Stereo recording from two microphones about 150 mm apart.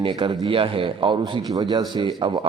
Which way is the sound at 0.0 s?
35° right (ahead or behind).